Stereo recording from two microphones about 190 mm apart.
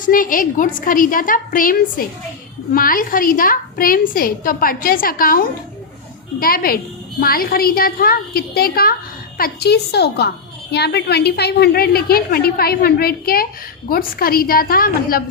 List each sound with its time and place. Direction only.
0.0 s a woman's voice: 45° left (ahead or behind)